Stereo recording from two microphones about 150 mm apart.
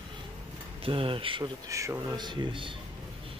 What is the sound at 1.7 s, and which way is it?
Speech, 20° right (ahead or behind).